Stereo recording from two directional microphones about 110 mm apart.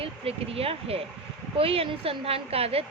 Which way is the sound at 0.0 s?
60° right (ahead or behind).